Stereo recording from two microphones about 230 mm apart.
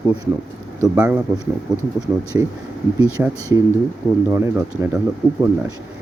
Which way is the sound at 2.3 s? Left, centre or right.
Centre.